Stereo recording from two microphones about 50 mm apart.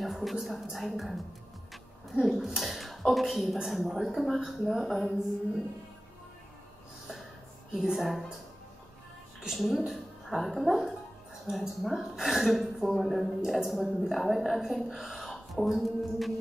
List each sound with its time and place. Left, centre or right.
0.0 s a woman's voice: centre
7.7 s a woman's voice: centre
9.4 s a woman's voice: centre